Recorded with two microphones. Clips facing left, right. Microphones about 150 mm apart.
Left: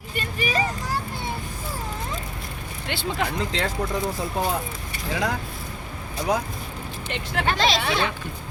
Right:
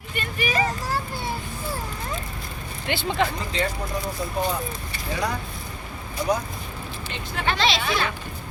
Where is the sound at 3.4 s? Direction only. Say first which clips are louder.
Left 1 dB; 90° left.